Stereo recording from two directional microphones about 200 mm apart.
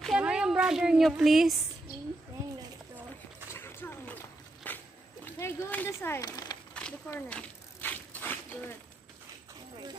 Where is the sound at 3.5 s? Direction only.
10° left (ahead or behind).